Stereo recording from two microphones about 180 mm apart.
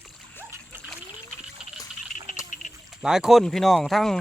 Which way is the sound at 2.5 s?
45° left (ahead or behind).